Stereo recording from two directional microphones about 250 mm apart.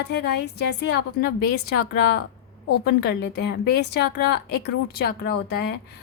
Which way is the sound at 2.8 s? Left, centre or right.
Left.